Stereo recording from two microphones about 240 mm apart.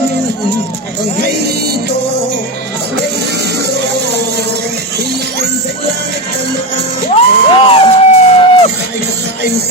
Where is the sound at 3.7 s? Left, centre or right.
Right.